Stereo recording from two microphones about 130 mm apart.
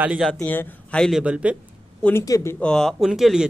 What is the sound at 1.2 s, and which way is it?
Speech, 10° right (ahead or behind).